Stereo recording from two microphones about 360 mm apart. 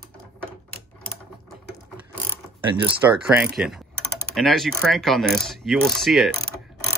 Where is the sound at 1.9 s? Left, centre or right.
Centre.